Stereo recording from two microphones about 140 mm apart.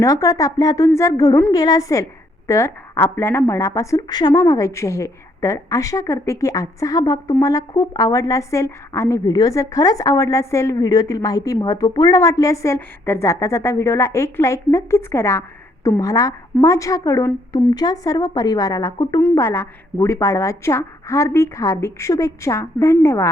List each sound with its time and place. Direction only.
0.0 s a woman's voice: 25° left (ahead or behind)